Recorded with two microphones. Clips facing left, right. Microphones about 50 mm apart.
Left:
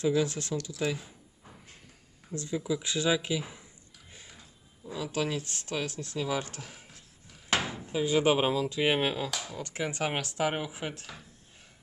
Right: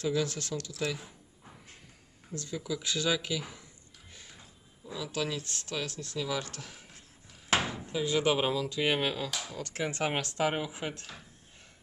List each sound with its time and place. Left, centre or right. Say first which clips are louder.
0.1 s speech: left 3 dB; centre
0.9 s a sound: left 2 dB; centre
2.3 s speech: left 4 dB; left
4.9 s speech: left 3 dB; left
7.9 s speech: left 4 dB; centre
9.3 s speech: left 1 dB; centre
9.6 s speech: left 1 dB; centre
9.8 s speech: even; centre